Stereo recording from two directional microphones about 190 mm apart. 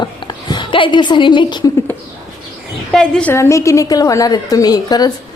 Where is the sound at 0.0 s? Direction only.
25° left (ahead or behind).